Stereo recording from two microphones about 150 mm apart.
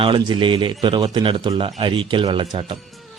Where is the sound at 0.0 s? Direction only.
30° right (ahead or behind).